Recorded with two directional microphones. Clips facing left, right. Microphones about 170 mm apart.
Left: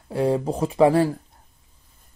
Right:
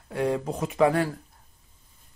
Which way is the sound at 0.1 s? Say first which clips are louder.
Left 5 dB; 30° left (ahead or behind).